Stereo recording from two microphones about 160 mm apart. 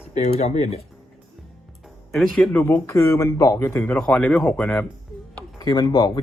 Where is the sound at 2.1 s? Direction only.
Centre (ahead or behind).